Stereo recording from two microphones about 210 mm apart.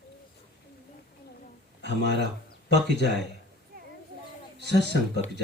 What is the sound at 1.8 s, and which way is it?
Speech, 50° right (ahead or behind).